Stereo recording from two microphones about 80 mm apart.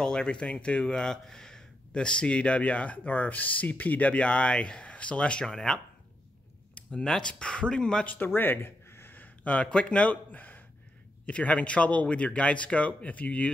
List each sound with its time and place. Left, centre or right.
0.0 s speech: centre